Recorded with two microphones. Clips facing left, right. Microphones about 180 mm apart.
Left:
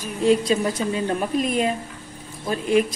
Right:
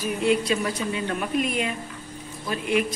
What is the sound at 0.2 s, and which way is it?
A woman's voice, 35° left (ahead or behind).